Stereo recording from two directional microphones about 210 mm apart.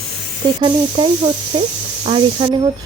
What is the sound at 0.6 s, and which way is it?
Speech, 25° right (ahead or behind).